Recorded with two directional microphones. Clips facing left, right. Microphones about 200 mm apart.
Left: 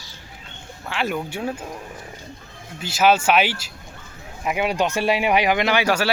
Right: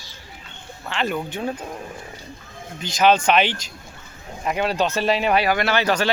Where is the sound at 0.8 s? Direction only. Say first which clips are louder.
Even; 5° left (ahead or behind).